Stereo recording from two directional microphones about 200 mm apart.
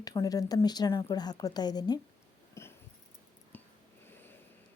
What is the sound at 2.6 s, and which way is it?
Dog, 15° left (ahead or behind).